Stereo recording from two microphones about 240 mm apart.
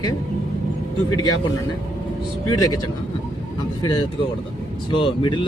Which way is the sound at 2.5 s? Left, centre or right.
Centre.